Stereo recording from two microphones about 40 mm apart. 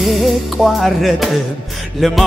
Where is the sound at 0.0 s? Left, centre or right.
Centre.